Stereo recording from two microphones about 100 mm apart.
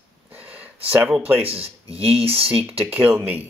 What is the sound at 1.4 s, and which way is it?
Speech, 75° right (ahead or behind).